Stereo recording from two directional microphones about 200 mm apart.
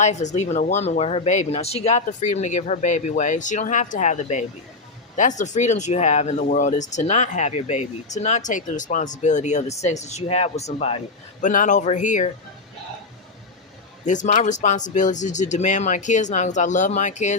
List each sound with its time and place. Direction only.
0.0 s speech: 35° left (ahead or behind)
14.0 s speech: 40° left (ahead or behind)